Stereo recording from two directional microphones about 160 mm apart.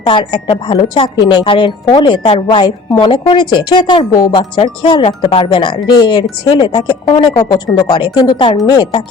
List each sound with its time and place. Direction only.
0.0 s a woman's voice: 30° left (ahead or behind)